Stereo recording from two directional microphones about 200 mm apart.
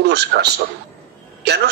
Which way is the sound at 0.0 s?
55° right (ahead or behind).